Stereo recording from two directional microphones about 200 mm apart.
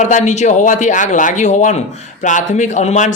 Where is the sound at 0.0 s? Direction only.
35° left (ahead or behind).